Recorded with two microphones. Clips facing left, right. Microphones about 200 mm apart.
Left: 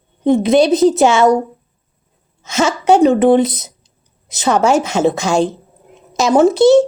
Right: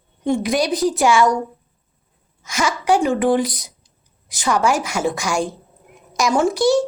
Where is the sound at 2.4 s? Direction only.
25° left (ahead or behind).